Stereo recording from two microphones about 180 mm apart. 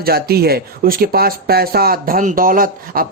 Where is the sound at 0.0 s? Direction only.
60° right (ahead or behind).